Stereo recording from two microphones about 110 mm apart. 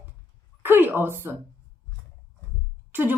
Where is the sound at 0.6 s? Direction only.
15° right (ahead or behind).